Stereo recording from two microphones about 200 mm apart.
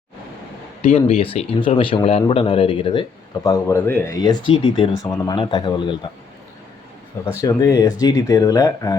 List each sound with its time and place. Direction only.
0.8 s speech: 30° left (ahead or behind)
7.4 s speech: 15° left (ahead or behind)